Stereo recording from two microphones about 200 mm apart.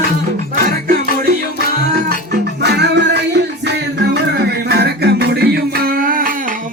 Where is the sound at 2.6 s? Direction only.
60° right (ahead or behind).